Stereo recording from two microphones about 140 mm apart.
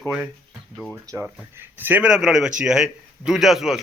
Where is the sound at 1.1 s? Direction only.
20° right (ahead or behind); by 3.8 s centre (ahead or behind).